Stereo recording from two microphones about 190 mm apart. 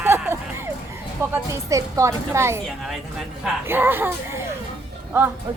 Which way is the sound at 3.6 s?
10° right (ahead or behind).